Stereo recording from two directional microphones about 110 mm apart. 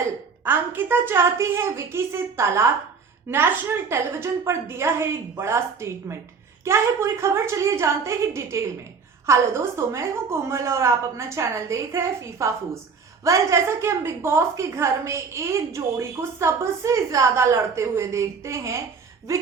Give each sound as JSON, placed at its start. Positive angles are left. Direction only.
{"t": 0.4, "sound": "a woman's voice", "side_deg": -20}